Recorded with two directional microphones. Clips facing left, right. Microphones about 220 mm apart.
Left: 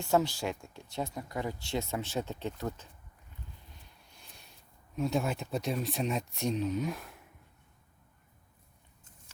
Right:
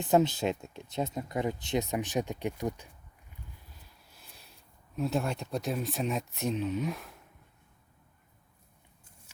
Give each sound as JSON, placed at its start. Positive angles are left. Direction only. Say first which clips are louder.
{"t": 0.0, "sound": "speech", "louder": "right 3 dB", "side_deg": -20}
{"t": 4.1, "sound": "a sound", "louder": "even", "side_deg": 0}
{"t": 4.9, "sound": "speech", "louder": "even", "side_deg": 0}